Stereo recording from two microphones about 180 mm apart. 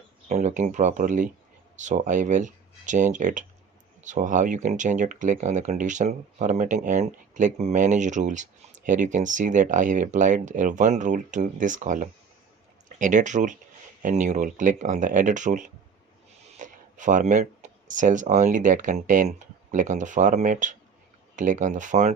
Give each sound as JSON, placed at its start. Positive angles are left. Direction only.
{"t": 0.3, "sound": "speech", "side_deg": -40}